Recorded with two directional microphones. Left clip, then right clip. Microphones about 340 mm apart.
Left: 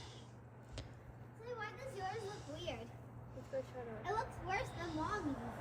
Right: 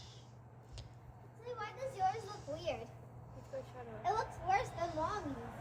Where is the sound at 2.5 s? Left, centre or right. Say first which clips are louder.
Right 7 dB; centre.